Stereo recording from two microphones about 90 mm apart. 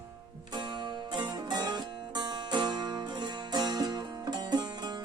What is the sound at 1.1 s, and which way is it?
Music, 55° right (ahead or behind).